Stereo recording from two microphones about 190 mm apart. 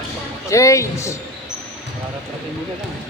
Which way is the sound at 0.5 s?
15° left (ahead or behind).